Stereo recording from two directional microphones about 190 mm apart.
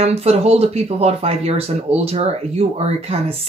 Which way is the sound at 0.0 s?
35° right (ahead or behind).